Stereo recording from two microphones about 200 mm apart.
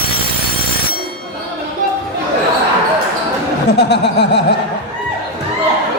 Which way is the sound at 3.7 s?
55° left (ahead or behind).